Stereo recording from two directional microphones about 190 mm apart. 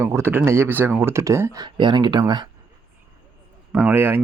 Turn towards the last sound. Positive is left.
turn(degrees=-10)  # may be behind; listen again after turning